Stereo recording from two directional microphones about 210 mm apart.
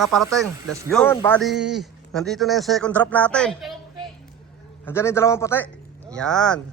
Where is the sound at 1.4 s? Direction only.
Centre (ahead or behind).